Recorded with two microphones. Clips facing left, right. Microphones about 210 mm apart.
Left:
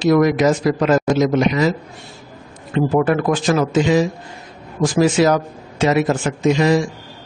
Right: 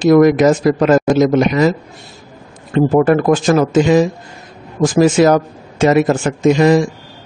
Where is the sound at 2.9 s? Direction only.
45° right (ahead or behind).